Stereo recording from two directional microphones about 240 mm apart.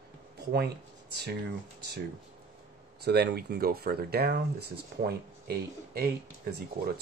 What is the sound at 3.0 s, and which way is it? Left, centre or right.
Speech, right.